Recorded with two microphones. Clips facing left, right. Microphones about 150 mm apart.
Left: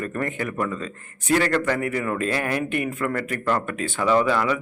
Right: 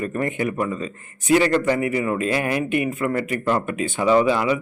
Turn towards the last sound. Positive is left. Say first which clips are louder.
# right 3 dB
turn(degrees=-15)  # may be behind; listen again after turning